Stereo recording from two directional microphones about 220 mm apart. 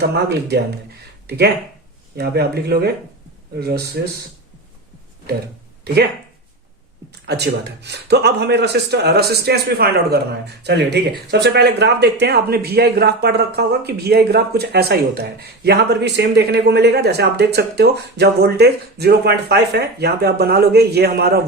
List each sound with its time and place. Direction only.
0.0 s a man's voice: 50° right (ahead or behind)
2.1 s a man's voice: 45° right (ahead or behind)
5.8 s speech: 45° right (ahead or behind)
7.1 s a man's voice: 50° right (ahead or behind)